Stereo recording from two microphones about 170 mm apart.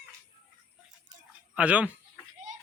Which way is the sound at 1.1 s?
25° right (ahead or behind).